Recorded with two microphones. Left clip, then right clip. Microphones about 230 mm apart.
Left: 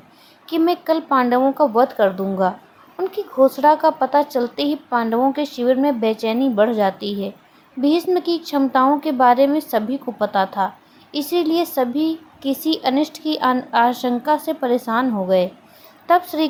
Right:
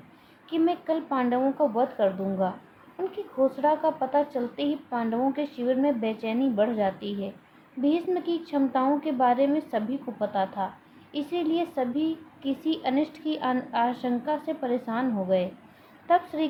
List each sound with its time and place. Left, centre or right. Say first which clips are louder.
0.5 s a child's voice: left 8 dB; left
3.6 s a child's voice: left 10 dB; left